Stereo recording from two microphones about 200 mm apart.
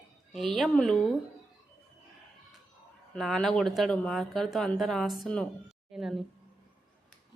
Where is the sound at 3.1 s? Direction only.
Centre (ahead or behind).